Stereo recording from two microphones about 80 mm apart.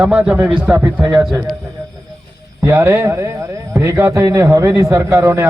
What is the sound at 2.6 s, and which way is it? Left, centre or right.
A man's voice, right.